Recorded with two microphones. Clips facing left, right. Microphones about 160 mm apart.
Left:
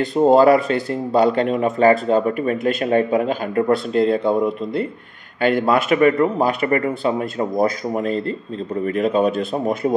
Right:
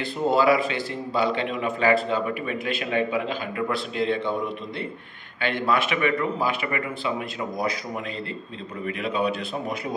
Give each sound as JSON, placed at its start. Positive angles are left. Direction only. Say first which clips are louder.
{"t": 0.1, "sound": "speech", "louder": "left 8 dB", "side_deg": 40}
{"t": 5.4, "sound": "speech", "louder": "left 7 dB", "side_deg": 45}